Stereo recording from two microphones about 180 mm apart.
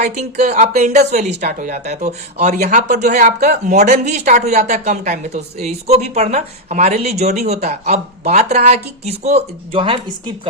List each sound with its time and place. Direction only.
0.0 s speech: 40° right (ahead or behind)